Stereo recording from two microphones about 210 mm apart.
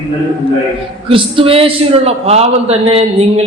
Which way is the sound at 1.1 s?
25° right (ahead or behind).